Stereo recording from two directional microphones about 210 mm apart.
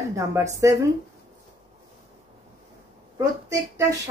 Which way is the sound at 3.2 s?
15° right (ahead or behind).